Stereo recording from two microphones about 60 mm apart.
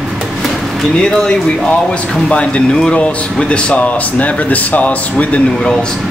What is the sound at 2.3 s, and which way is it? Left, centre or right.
Speech, centre.